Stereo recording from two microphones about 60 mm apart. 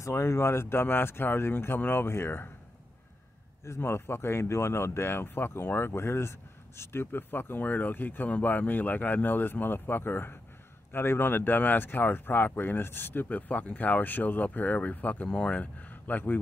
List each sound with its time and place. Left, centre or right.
0.0 s speech: left
3.6 s speech: left